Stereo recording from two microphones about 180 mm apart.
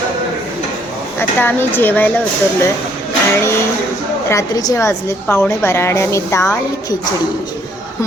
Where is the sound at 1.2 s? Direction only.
10° left (ahead or behind).